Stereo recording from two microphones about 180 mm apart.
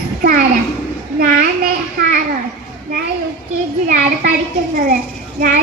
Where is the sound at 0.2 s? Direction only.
50° right (ahead or behind).